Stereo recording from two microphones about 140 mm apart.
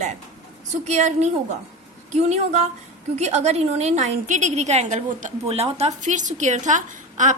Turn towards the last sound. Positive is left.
turn(degrees=-60)  # may be behind; listen again after turning